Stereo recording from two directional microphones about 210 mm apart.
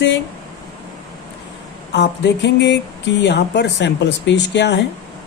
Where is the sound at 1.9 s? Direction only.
55° left (ahead or behind).